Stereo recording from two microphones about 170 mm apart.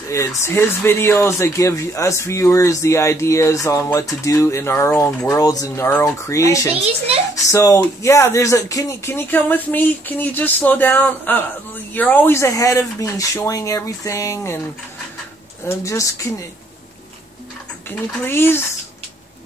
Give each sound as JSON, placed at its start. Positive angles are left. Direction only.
{"t": 0.1, "sound": "speech", "side_deg": 15}
{"t": 15.8, "sound": "speech", "side_deg": 20}
{"t": 17.8, "sound": "speech", "side_deg": 10}